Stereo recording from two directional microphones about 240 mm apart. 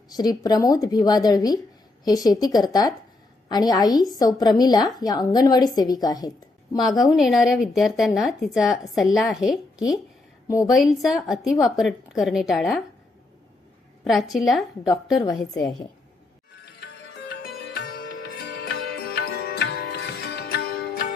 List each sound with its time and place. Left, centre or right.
0.1 s a woman's voice: centre
6.7 s speech: centre
14.0 s speech: centre
14.8 s a woman's voice: centre
16.8 s sitar: left